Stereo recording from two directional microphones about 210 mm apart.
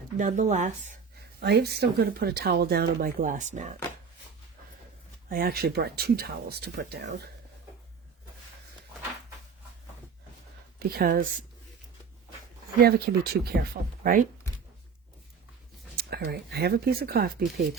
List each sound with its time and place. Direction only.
0.2 s speech: 35° right (ahead or behind)
1.4 s speech: 50° right (ahead or behind); by 3.8 s 35° right (ahead or behind)
5.3 s speech: 45° right (ahead or behind)
10.8 s speech: 45° right (ahead or behind)
12.8 s speech: 45° right (ahead or behind)
16.0 s speech: 50° right (ahead or behind)